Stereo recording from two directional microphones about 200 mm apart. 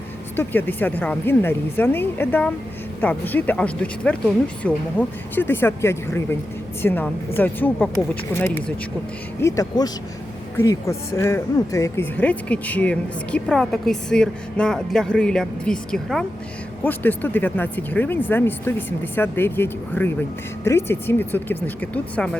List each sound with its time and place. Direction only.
0.3 s speech: 10° left (ahead or behind)